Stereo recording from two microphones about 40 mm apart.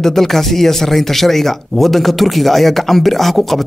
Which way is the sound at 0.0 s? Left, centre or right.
Centre.